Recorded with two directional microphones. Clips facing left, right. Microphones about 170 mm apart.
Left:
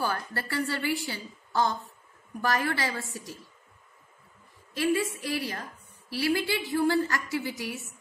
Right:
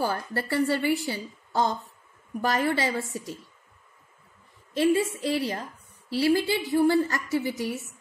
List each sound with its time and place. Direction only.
0.0 s a woman's voice: 25° right (ahead or behind)
4.7 s a woman's voice: 25° right (ahead or behind)